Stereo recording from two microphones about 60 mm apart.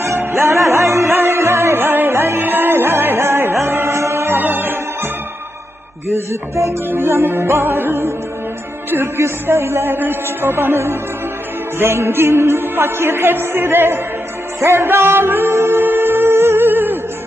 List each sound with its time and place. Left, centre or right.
0.2 s music: right
4.4 s music: right
6.1 s music: right